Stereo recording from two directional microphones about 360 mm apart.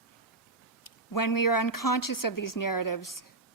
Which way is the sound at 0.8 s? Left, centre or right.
Left.